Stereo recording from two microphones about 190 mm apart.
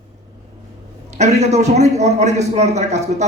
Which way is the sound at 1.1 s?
35° right (ahead or behind).